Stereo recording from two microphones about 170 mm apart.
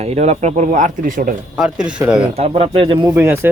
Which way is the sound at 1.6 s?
5° right (ahead or behind).